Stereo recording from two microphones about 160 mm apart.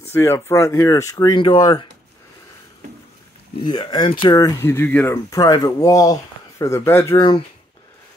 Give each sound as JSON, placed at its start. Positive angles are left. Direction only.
{"t": 0.1, "sound": "speech", "side_deg": 15}
{"t": 3.6, "sound": "speech", "side_deg": 30}
{"t": 7.2, "sound": "speech", "side_deg": 30}